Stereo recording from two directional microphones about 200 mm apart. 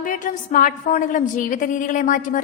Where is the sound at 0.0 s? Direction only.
40° left (ahead or behind).